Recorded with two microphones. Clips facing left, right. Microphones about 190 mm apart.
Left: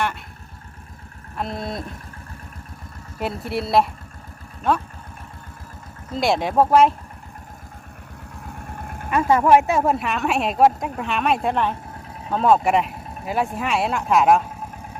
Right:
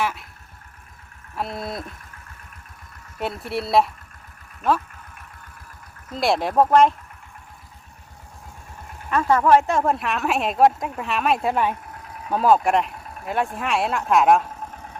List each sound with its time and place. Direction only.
1.4 s a woman's voice: centre (ahead or behind)
3.2 s a woman's voice: centre (ahead or behind)
6.1 s a woman's voice: centre (ahead or behind)
8.4 s vehicle: 60° left (ahead or behind)
9.0 s a woman's voice: 10° left (ahead or behind)